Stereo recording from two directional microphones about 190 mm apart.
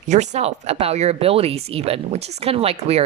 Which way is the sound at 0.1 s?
40° right (ahead or behind).